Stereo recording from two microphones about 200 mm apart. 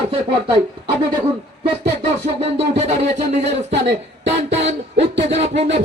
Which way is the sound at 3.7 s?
60° right (ahead or behind).